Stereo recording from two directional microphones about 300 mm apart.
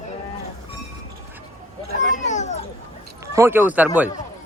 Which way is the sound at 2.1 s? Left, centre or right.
Left.